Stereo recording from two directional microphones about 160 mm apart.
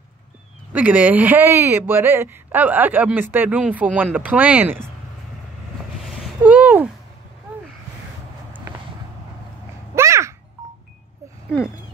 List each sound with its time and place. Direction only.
0.7 s speech: 10° right (ahead or behind)
6.4 s a sound: 10° right (ahead or behind)
9.9 s babbling: 20° right (ahead or behind)
11.5 s speech: 5° right (ahead or behind)